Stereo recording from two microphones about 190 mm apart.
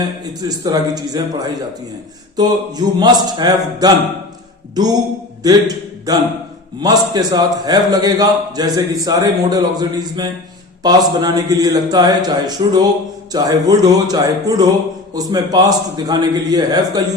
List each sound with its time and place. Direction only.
0.4 s a man's voice: 20° right (ahead or behind)